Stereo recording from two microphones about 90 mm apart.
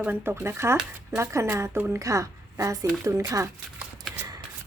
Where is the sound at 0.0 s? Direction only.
20° right (ahead or behind); by 3.5 s 40° right (ahead or behind).